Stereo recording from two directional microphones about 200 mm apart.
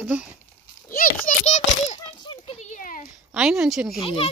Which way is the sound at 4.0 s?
30° left (ahead or behind).